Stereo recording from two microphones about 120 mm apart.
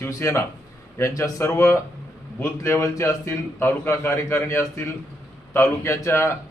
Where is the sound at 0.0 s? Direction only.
25° left (ahead or behind).